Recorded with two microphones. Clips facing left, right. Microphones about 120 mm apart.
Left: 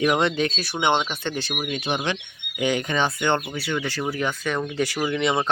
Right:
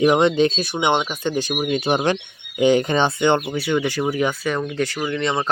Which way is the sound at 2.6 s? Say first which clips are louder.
Right 6 dB; 30° right (ahead or behind).